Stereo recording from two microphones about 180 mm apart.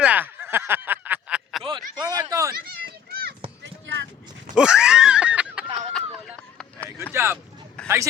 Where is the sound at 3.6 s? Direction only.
85° right.